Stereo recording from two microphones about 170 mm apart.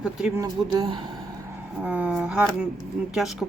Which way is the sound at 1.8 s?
10° right (ahead or behind).